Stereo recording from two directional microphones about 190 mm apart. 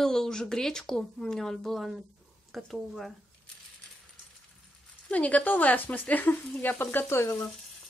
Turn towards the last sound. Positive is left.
turn(degrees=10)  # may be behind; listen again after turning